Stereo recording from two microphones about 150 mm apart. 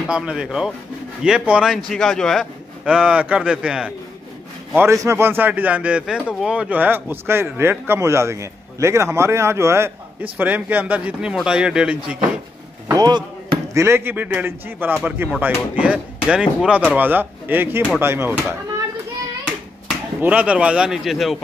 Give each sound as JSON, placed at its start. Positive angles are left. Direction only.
{"t": 0.1, "sound": "a man's voice", "side_deg": -5}
{"t": 4.7, "sound": "speech", "side_deg": -20}
{"t": 12.8, "sound": "a sound", "side_deg": -25}
{"t": 13.7, "sound": "speech", "side_deg": -15}
{"t": 20.2, "sound": "a man's voice", "side_deg": -10}